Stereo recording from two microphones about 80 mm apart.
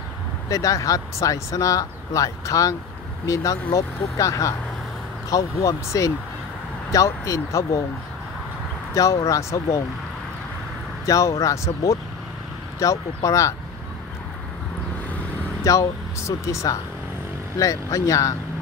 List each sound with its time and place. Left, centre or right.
0.5 s speech: left
8.9 s speech: left
11.1 s speech: left
15.6 s speech: left